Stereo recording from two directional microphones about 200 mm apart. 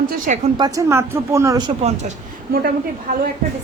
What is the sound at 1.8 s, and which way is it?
Speech, 35° right (ahead or behind).